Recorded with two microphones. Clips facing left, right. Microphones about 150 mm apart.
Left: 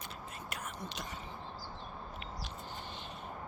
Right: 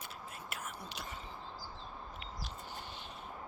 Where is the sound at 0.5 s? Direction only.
5° right (ahead or behind).